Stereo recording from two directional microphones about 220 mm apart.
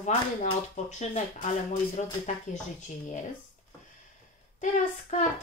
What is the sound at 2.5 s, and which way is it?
Speech, 35° left (ahead or behind).